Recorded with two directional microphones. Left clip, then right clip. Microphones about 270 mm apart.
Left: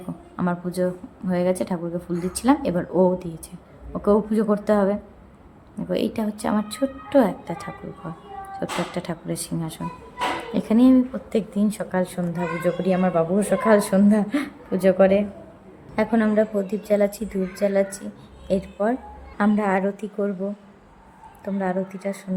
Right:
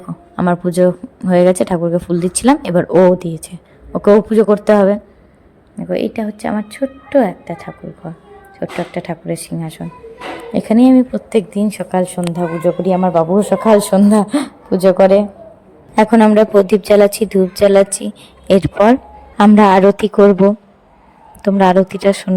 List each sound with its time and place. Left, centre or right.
0.3 s speech: right
5.9 s a woman's voice: centre; by 17.9 s right
19.4 s a woman's voice: right
21.4 s a woman's voice: right